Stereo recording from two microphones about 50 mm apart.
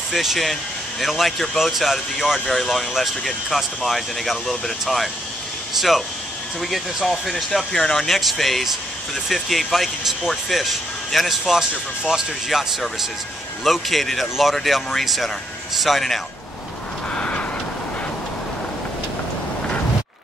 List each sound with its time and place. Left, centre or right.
0.1 s speech: centre
11.7 s speech: centre
12.4 s speech: centre
17.1 s vehicle: left